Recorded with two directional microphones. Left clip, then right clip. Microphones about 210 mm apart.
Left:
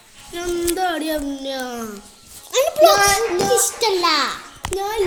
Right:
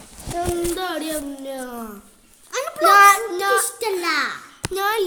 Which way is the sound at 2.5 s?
5° left (ahead or behind).